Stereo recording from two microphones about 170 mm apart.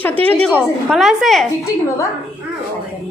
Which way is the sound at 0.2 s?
10° left (ahead or behind).